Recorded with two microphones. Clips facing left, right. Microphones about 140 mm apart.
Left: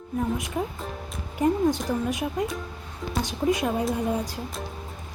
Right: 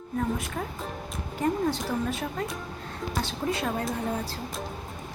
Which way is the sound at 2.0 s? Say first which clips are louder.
Left 4 dB; 15° left (ahead or behind).